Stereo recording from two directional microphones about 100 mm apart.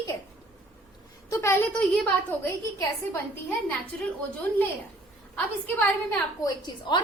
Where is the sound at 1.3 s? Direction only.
30° left (ahead or behind).